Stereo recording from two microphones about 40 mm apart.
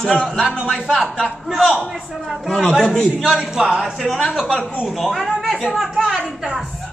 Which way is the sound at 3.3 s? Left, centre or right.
Centre.